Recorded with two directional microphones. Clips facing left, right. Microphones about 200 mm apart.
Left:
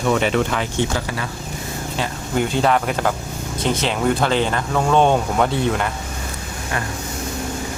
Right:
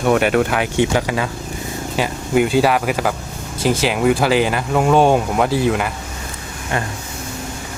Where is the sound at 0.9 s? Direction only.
90° right.